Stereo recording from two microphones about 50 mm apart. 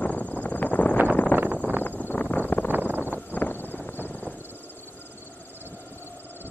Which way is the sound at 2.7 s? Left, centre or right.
Right.